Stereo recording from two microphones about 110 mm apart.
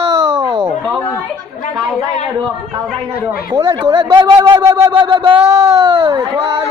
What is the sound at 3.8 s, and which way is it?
Speech, 45° right (ahead or behind).